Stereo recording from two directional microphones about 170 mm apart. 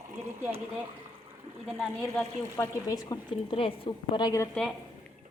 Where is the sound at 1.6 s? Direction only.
Centre (ahead or behind).